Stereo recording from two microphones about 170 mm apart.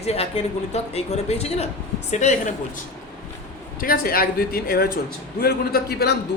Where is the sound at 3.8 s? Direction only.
60° left (ahead or behind).